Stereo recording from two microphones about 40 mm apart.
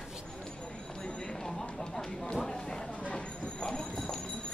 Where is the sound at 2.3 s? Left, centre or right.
Centre.